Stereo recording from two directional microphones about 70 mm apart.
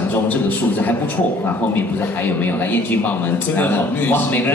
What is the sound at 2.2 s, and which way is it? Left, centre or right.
A man's voice, left.